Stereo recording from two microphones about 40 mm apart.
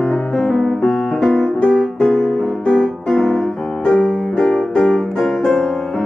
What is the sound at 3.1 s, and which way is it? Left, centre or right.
Piano, centre.